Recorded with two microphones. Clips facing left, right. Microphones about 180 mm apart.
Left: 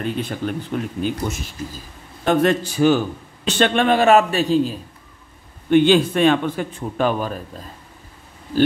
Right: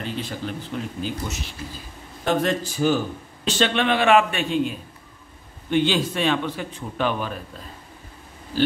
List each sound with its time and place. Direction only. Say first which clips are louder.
0.0 s a man's voice: left 5 dB; 55° left (ahead or behind)
2.2 s a man's voice: left 5 dB; 65° left (ahead or behind)
3.4 s a man's voice: left 4 dB; 55° left (ahead or behind); by 4.7 s 35° left (ahead or behind)
5.7 s a man's voice: left 7 dB; 55° left (ahead or behind)